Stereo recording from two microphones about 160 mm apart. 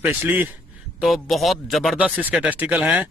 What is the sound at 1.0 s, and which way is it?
Speech, centre (ahead or behind).